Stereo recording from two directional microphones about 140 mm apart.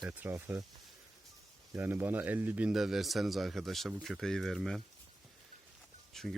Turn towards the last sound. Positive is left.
turn(degrees=5)  # may be behind; listen again after turning